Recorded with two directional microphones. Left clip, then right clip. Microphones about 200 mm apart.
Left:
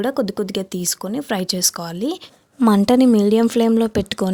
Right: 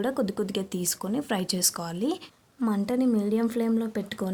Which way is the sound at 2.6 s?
45° left (ahead or behind).